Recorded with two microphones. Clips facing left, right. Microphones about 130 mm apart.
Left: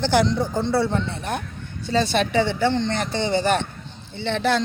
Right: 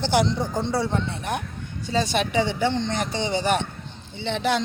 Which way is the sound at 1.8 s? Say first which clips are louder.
Left 3 dB; 10° right (ahead or behind).